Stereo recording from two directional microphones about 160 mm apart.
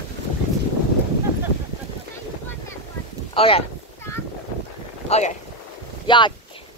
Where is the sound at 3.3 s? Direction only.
35° left (ahead or behind).